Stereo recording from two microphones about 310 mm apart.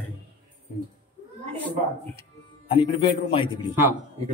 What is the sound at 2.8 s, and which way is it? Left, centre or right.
Speech, centre.